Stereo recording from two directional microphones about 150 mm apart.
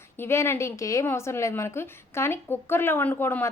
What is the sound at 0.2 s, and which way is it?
A woman's voice, 15° left (ahead or behind).